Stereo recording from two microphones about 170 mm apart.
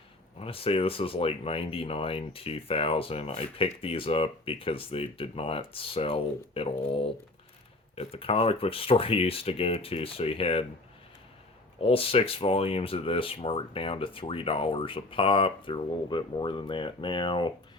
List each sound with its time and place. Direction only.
0.3 s speech: 35° left (ahead or behind)
11.8 s speech: 35° left (ahead or behind)